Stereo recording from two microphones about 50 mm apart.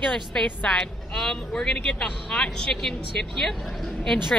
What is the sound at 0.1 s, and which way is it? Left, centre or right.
Speech, centre.